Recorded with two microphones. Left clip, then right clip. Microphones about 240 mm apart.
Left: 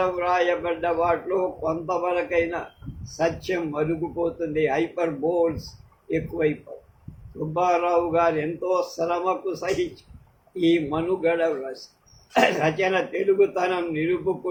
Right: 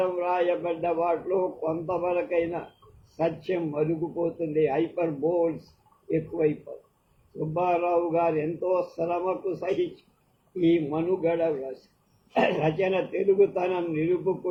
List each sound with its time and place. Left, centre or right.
0.0 s a man's voice: left